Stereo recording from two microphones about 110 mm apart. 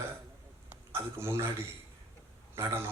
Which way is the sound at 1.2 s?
25° right (ahead or behind).